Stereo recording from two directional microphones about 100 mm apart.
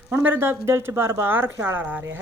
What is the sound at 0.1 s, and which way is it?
A woman's voice, 20° right (ahead or behind).